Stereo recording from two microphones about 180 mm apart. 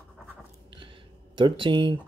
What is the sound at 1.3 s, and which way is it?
Speech, 30° right (ahead or behind).